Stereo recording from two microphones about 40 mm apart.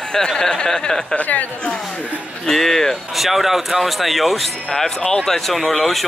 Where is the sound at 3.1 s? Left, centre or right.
Centre.